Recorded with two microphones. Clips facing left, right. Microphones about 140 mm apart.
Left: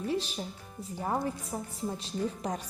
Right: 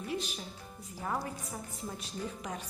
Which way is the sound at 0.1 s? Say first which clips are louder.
Left 3 dB; 35° left (ahead or behind).